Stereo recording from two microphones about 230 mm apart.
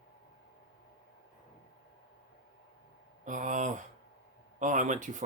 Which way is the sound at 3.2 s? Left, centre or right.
Right.